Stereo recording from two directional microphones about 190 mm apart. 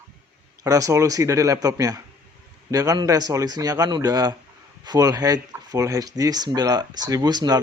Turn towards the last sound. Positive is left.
turn(degrees=-20)  # may be behind; listen again after turning